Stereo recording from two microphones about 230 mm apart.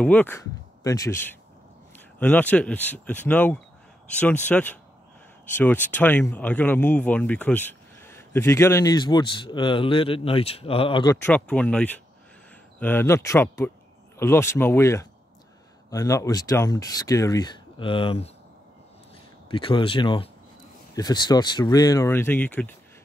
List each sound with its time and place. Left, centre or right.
0.0 s speech: centre
11.2 s speech: centre; by 18.3 s left
19.5 s speech: left; by 22.7 s centre